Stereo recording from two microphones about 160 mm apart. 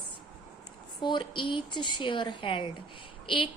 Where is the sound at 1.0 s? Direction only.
30° left (ahead or behind).